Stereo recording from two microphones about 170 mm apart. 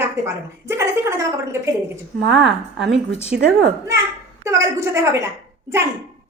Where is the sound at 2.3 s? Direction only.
Centre (ahead or behind).